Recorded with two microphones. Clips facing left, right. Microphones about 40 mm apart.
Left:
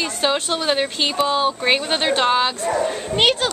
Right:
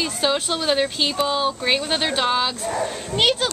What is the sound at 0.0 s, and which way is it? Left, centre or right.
A woman's voice, centre.